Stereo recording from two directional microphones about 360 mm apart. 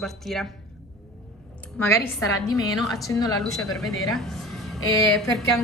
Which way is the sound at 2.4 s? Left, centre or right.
Centre.